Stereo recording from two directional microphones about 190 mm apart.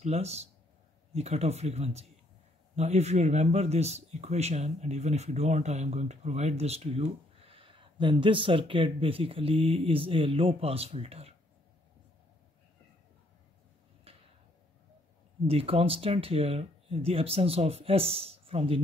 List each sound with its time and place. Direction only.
0.0 s speech: 35° right (ahead or behind)
15.4 s speech: 30° right (ahead or behind)